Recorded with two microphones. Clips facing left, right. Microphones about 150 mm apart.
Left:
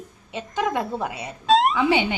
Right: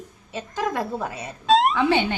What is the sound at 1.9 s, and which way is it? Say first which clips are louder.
Speech: even; 10° left (ahead or behind).